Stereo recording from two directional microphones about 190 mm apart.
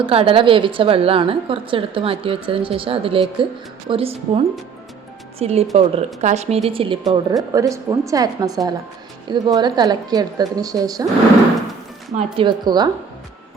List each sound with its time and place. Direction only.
0.0 s a woman's voice: 30° right (ahead or behind)
12.4 s a woman's voice: 25° right (ahead or behind)